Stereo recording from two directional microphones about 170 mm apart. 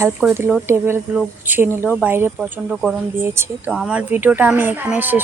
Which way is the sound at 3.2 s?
15° right (ahead or behind).